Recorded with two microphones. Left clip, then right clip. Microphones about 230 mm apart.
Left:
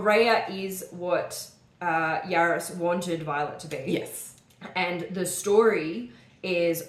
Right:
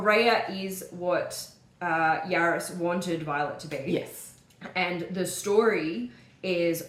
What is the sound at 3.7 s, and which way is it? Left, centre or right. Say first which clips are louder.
Speech: even; left.